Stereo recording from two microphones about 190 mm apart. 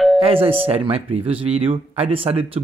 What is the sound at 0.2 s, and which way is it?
Speech, 30° right (ahead or behind).